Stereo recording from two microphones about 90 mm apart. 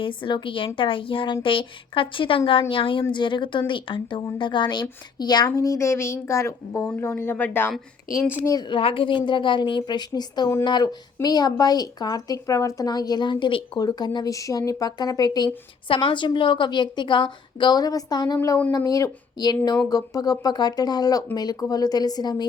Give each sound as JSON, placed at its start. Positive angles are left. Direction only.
{"t": 0.0, "sound": "speech", "side_deg": 65}
{"t": 3.1, "sound": "a woman's voice", "side_deg": 60}
{"t": 5.5, "sound": "a woman's voice", "side_deg": 35}
{"t": 8.6, "sound": "a woman's voice", "side_deg": 80}
{"t": 13.7, "sound": "speech", "side_deg": 50}
{"t": 15.9, "sound": "a woman's voice", "side_deg": 65}
{"t": 18.8, "sound": "a woman's voice", "side_deg": 40}